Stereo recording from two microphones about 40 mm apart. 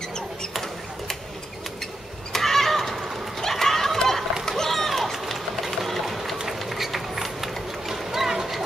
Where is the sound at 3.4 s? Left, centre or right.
Centre.